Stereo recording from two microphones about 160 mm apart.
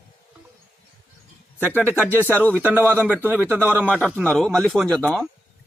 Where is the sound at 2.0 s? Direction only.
10° right (ahead or behind).